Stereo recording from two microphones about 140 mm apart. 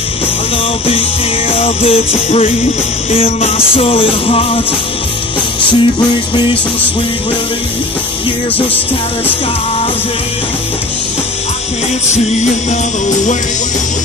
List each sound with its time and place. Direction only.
1.5 s music: 40° left (ahead or behind)
5.7 s music: 35° left (ahead or behind)